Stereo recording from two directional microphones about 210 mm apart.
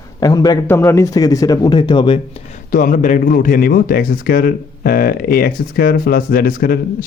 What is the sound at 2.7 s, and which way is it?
Speech, 40° left (ahead or behind).